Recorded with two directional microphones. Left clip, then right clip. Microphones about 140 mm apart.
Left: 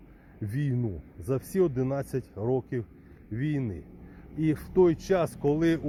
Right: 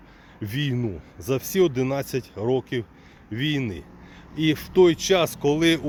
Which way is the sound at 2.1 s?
5° right (ahead or behind).